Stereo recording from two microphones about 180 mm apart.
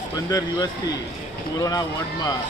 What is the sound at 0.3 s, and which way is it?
A man's voice, 20° left (ahead or behind).